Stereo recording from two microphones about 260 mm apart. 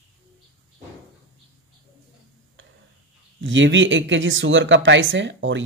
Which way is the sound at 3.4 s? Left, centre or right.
Right.